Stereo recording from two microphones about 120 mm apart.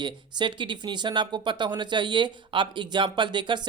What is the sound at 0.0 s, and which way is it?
Speech, 40° right (ahead or behind).